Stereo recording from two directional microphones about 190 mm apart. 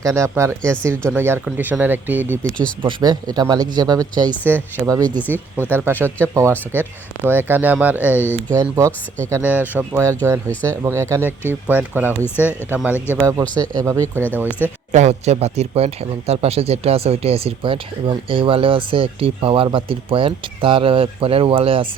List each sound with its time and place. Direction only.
0.0 s speech: 15° right (ahead or behind)
0.6 s speech: 5° left (ahead or behind)
1.1 s speech: 10° right (ahead or behind)
2.8 s speech: 20° right (ahead or behind)
5.2 s speech: 10° left (ahead or behind)
5.7 s speech: 10° right (ahead or behind)
8.2 s speech: 10° left (ahead or behind)
8.6 s speech: 15° right (ahead or behind)
12.2 s speech: 10° left (ahead or behind)
12.7 s speech: 10° right (ahead or behind)
14.9 s speech: 35° right (ahead or behind)